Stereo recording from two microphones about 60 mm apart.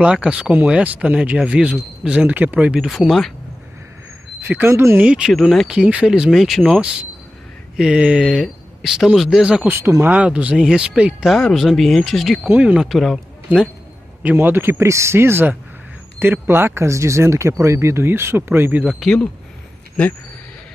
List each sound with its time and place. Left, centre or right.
0.0 s speech: centre
3.1 s speech: centre
4.4 s speech: right
4.6 s speech: right
4.9 s speech: centre
6.6 s speech: centre
8.3 s speech: centre
9.4 s speech: centre
11.2 s speech: centre
12.4 s speech: right
12.7 s speech: centre
14.2 s speech: right